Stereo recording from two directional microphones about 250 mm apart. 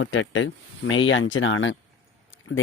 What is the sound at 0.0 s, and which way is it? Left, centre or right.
Speech, left.